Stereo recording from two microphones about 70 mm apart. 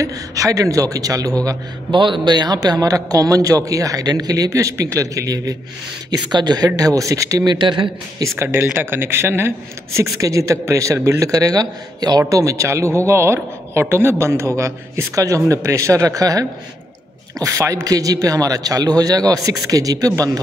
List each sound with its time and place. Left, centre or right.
0.0 s speech: right
2.2 s speech: right
4.5 s speech: right
6.0 s speech: right
8.4 s speech: right
9.9 s speech: right